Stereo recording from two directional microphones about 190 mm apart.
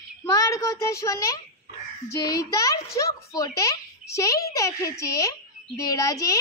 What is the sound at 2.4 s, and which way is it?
A child's voice, 20° left (ahead or behind).